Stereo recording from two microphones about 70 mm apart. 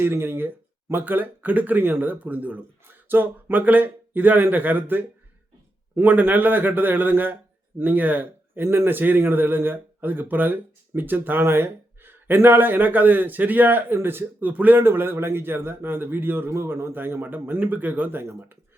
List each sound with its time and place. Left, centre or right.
0.0 s a man's voice: right